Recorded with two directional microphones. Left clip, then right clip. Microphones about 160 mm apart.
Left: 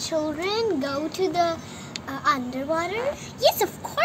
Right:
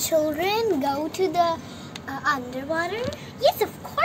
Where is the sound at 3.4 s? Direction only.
90° left.